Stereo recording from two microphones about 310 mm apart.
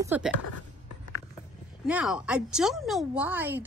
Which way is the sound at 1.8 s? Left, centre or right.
Centre.